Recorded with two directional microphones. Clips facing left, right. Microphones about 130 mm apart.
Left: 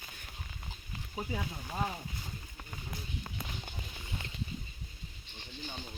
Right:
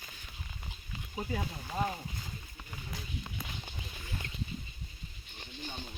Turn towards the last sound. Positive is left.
turn(degrees=25)  # may be behind; listen again after turning